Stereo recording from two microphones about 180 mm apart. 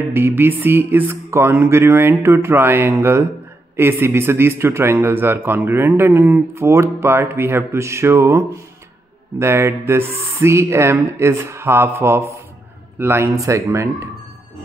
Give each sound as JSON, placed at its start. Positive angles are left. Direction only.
{"t": 0.1, "sound": "a man's voice", "side_deg": -10}